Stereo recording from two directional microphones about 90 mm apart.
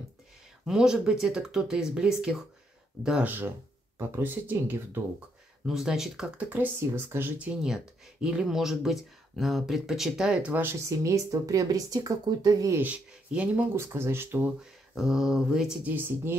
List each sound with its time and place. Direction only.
0.7 s speech: 5° right (ahead or behind)
4.2 s speech: 20° right (ahead or behind)
5.7 s speech: 5° right (ahead or behind)
11.0 s speech: 40° right (ahead or behind)
12.7 s speech: 15° right (ahead or behind)
13.7 s speech: 30° right (ahead or behind)
14.6 s speech: 5° right (ahead or behind)
15.9 s speech: 20° right (ahead or behind)